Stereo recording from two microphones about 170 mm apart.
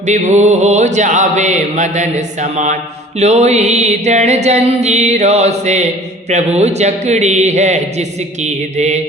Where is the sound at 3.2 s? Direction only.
40° right (ahead or behind).